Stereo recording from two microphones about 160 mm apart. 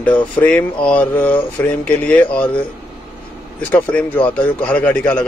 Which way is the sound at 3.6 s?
10° left (ahead or behind).